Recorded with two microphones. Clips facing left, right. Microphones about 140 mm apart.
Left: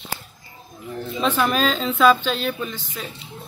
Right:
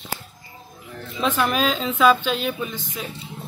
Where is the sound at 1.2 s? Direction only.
5° right (ahead or behind).